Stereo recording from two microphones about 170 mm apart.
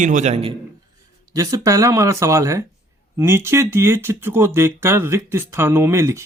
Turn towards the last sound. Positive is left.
turn(degrees=-15)  # may be behind; listen again after turning